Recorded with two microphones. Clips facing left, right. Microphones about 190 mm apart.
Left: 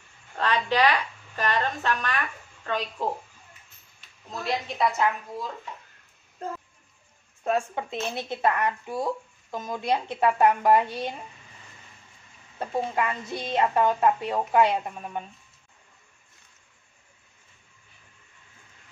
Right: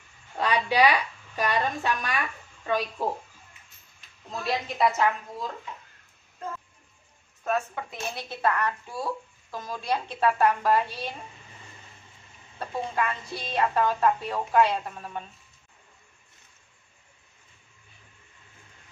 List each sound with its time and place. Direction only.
0.4 s a woman's voice: 10° right (ahead or behind)
4.3 s a woman's voice: centre (ahead or behind)
7.4 s speech: 25° left (ahead or behind)
12.5 s speech: 20° left (ahead or behind)